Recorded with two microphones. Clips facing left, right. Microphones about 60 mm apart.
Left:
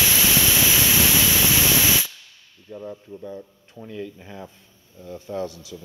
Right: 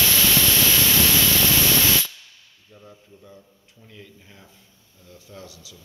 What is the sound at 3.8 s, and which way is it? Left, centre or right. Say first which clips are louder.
Speech: left 12 dB; left.